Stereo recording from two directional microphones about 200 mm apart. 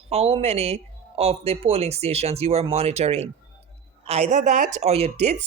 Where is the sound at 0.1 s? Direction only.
30° right (ahead or behind).